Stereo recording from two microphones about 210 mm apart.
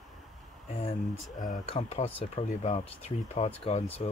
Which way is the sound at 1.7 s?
30° left (ahead or behind).